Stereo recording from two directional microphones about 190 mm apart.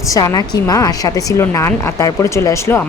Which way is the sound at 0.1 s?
20° left (ahead or behind).